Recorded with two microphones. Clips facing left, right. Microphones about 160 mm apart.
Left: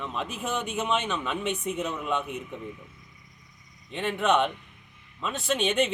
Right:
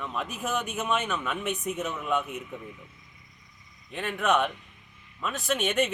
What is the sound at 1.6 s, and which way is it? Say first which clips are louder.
Speech: left 1 dB; 20° left (ahead or behind).